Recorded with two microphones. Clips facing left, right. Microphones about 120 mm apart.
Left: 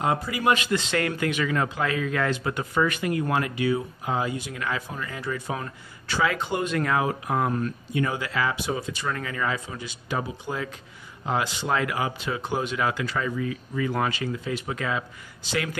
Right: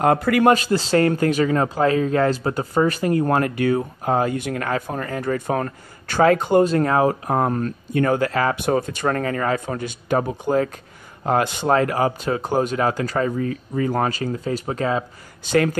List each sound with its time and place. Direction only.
0.0 s speech: 60° right (ahead or behind)
0.5 s speech: 35° right (ahead or behind)
15.4 s speech: 45° right (ahead or behind)